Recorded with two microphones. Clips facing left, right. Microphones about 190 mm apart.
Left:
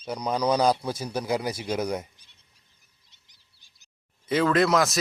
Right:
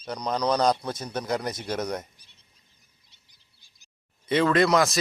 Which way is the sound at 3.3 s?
20° left (ahead or behind).